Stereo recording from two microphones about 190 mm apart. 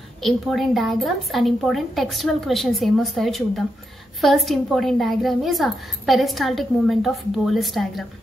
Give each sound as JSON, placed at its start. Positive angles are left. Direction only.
{"t": 0.2, "sound": "a woman's voice", "side_deg": 0}